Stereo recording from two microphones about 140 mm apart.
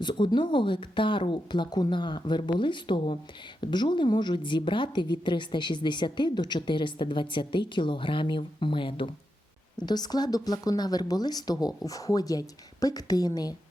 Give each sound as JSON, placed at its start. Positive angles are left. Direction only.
{"t": 0.0, "sound": "a woman's voice", "side_deg": 35}